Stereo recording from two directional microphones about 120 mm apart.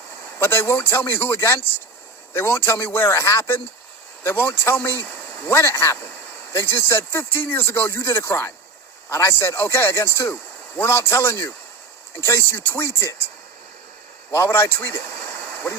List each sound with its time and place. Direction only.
0.3 s a man's voice: 15° left (ahead or behind)
14.3 s a man's voice: 20° left (ahead or behind)